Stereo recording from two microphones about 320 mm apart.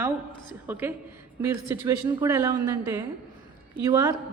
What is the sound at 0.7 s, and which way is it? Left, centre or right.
A woman's voice, centre.